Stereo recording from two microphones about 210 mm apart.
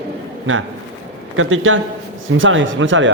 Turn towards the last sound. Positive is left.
turn(degrees=-65)  # may be behind; listen again after turning